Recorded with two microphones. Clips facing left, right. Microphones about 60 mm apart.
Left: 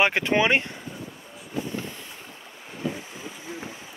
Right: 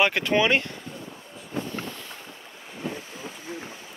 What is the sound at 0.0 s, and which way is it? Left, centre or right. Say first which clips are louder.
Speech: even; left.